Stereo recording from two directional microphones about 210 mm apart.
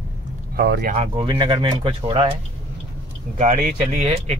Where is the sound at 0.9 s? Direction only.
25° right (ahead or behind).